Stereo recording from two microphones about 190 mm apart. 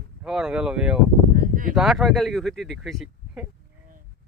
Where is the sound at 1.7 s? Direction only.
Centre (ahead or behind).